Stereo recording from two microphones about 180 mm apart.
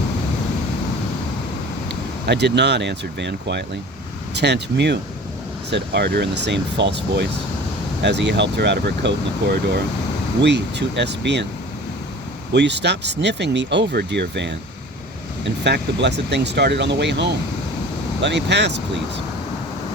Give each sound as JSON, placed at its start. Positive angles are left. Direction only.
{"t": 1.9, "sound": "speech", "side_deg": -70}
{"t": 12.5, "sound": "speech", "side_deg": -75}
{"t": 15.6, "sound": "speech", "side_deg": -70}